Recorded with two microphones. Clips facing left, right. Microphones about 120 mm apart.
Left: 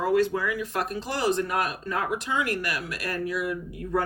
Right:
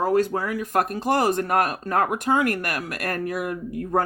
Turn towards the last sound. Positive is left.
turn(degrees=-50)  # may be behind; listen again after turning